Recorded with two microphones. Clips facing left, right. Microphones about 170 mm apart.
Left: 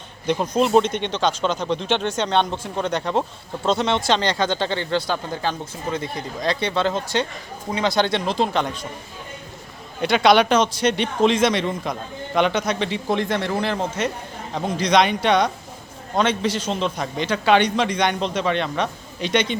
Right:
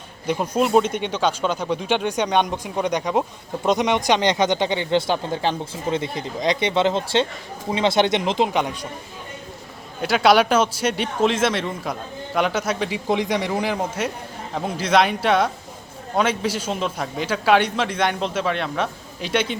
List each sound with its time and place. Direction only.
0.3 s speech: 10° right (ahead or behind)
10.0 s a man's voice: 5° right (ahead or behind)